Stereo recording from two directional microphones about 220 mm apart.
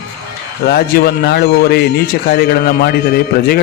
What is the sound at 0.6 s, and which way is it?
A man's voice, 45° left (ahead or behind).